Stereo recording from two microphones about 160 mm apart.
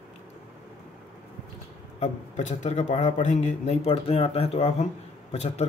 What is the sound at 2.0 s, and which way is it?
A man's voice, 45° left (ahead or behind).